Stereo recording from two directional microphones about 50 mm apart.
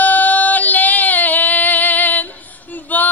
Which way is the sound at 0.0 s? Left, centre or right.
Left.